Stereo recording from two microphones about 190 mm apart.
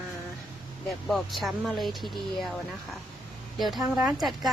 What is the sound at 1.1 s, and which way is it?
Speech, centre (ahead or behind).